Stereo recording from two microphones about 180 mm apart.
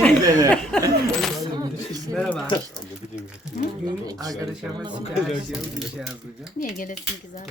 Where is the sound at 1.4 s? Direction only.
20° right (ahead or behind).